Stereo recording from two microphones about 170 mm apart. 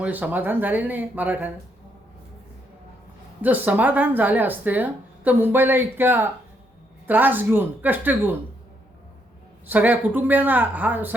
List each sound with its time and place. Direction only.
0.0 s speech: 10° right (ahead or behind)
3.4 s speech: 10° right (ahead or behind)
9.6 s speech: 10° right (ahead or behind)